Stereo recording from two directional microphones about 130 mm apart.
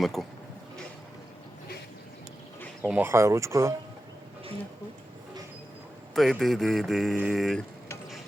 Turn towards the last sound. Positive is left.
turn(degrees=0)  # may be behind; listen again after turning